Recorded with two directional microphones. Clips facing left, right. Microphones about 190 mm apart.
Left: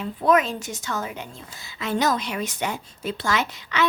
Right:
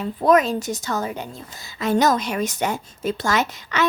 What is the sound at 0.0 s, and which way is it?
A woman's voice, 40° right (ahead or behind).